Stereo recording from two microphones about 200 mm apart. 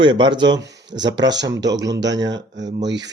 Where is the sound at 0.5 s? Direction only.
60° right (ahead or behind).